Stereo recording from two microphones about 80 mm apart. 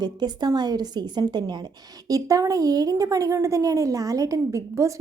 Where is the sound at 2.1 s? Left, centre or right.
Right.